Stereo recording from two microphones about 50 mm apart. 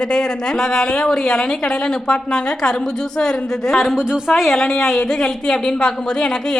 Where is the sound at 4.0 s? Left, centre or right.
Centre.